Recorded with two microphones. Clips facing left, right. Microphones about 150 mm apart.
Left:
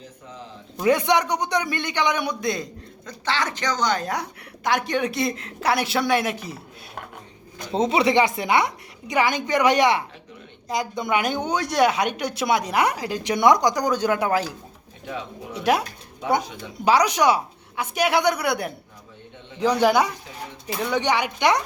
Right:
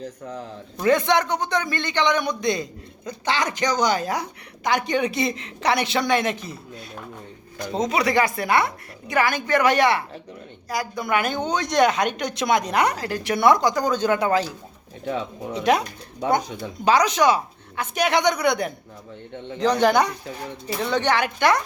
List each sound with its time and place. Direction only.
0.8 s a woman's voice: 10° left (ahead or behind)
3.1 s a woman's voice: 15° right (ahead or behind); by 6.5 s 10° left (ahead or behind)
7.7 s a woman's voice: 30° left (ahead or behind); by 14.4 s 10° left (ahead or behind)
16.8 s a woman's voice: 10° left (ahead or behind)